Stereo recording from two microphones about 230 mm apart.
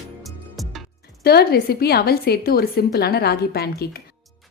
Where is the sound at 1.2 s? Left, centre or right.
Left.